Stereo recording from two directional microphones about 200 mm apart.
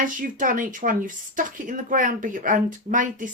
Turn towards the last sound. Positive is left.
turn(degrees=-40)  # may be behind; listen again after turning